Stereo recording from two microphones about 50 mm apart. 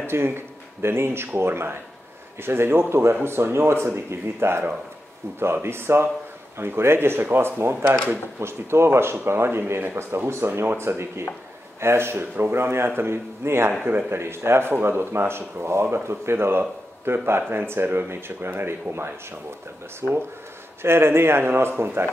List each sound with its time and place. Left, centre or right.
0.0 s speech: right
8.4 s speech: right
12.2 s speech: right
20.0 s speech: right
20.8 s speech: right